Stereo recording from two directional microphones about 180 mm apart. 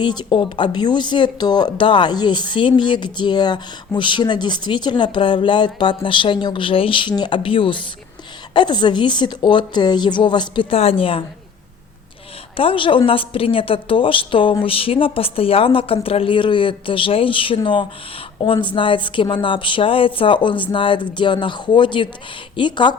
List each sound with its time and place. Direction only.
0.0 s speech: 25° left (ahead or behind)
12.5 s speech: 30° left (ahead or behind)